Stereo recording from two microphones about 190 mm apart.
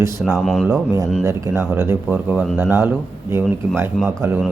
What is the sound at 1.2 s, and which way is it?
A man's voice, 15° right (ahead or behind).